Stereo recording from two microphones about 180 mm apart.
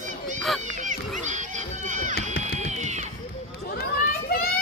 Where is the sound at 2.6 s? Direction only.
40° right (ahead or behind).